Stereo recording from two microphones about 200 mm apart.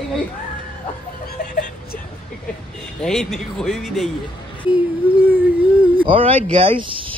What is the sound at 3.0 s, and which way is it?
Speech, centre (ahead or behind).